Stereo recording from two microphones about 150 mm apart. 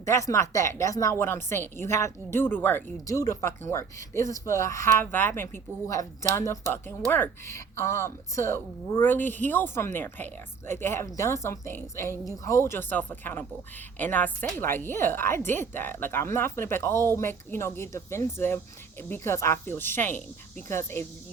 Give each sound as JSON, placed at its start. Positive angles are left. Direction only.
{"t": 0.0, "sound": "a woman's voice", "side_deg": 20}